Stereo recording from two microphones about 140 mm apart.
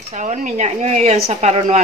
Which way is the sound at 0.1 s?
60° right (ahead or behind).